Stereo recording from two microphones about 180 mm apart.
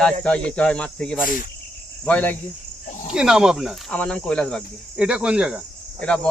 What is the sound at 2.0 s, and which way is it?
Cricket, 10° left (ahead or behind).